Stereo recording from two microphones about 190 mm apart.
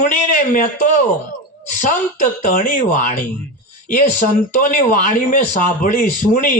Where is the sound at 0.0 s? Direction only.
50° left (ahead or behind).